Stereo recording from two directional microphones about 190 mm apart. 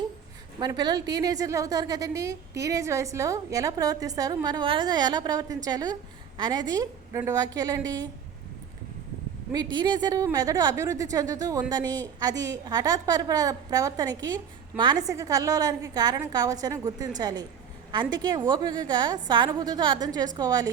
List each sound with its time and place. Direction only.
0.6 s a woman's voice: 20° right (ahead or behind)
9.7 s a woman's voice: 25° right (ahead or behind)